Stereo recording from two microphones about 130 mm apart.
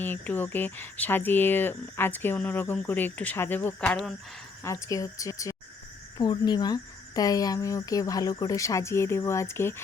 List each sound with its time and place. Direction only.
0.0 s speech: 15° left (ahead or behind)
4.6 s speech: 25° left (ahead or behind)